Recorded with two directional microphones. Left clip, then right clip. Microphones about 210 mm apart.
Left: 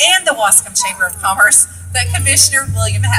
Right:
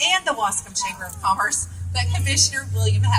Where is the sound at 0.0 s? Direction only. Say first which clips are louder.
Left 8 dB; 25° left (ahead or behind).